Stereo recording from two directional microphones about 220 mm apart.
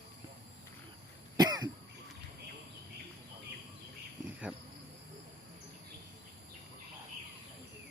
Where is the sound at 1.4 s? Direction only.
20° right (ahead or behind).